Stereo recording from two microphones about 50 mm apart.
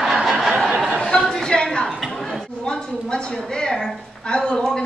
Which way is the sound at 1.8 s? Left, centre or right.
Centre.